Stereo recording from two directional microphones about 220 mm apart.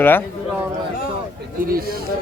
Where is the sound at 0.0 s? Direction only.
10° left (ahead or behind).